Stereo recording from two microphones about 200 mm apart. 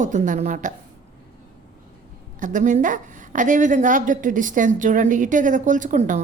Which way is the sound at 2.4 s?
40° right (ahead or behind).